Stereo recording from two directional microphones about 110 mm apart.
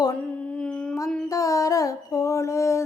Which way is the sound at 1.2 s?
30° left (ahead or behind).